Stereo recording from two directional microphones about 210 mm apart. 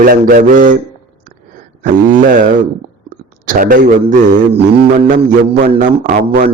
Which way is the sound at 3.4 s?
40° right (ahead or behind).